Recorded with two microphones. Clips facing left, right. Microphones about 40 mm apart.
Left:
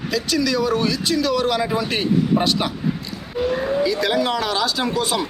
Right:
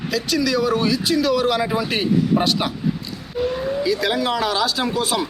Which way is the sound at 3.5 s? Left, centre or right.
Left.